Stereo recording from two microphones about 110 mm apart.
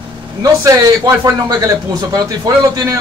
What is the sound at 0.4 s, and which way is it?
Speech, 35° right (ahead or behind).